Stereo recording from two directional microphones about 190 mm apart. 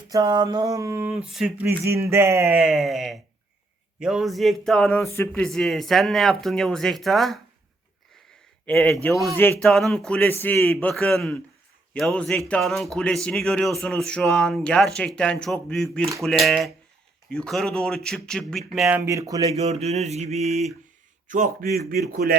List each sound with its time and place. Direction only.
0.1 s a sound: 20° right (ahead or behind)
1.3 s speech: centre (ahead or behind)
1.6 s a sound: 15° right (ahead or behind)
2.6 s speech: centre (ahead or behind)
8.6 s speech: 10° left (ahead or behind); by 19.5 s 20° right (ahead or behind)
19.5 s mantra: 35° right (ahead or behind)
21.2 s speech: 50° right (ahead or behind)